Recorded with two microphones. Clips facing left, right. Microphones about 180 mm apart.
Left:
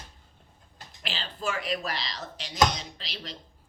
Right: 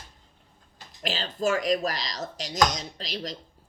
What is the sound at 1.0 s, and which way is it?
Speech, 40° right (ahead or behind).